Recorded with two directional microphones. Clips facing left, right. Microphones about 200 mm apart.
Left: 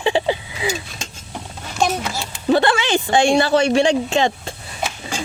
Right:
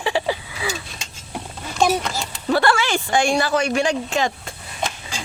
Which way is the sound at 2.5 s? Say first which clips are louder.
Left 3 dB; 20° left (ahead or behind).